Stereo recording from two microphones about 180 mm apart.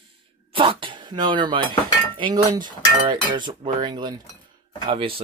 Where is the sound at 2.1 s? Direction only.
25° right (ahead or behind).